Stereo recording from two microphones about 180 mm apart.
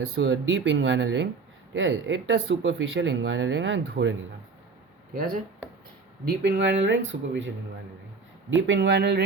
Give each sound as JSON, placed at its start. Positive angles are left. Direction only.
{"t": 0.2, "sound": "speech", "side_deg": -90}
{"t": 5.1, "sound": "speech", "side_deg": -50}
{"t": 6.2, "sound": "speech", "side_deg": -65}